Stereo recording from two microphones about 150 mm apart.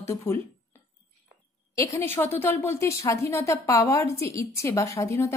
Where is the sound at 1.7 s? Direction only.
20° left (ahead or behind).